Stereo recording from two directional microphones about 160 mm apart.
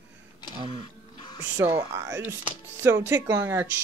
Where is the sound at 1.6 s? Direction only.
15° right (ahead or behind).